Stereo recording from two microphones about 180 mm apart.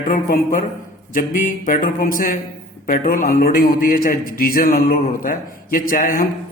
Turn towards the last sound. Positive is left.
turn(degrees=50)  # may be behind; listen again after turning